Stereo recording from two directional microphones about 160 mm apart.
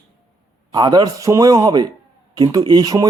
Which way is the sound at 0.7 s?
25° right (ahead or behind).